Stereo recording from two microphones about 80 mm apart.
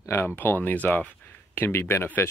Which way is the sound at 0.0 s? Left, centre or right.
Left.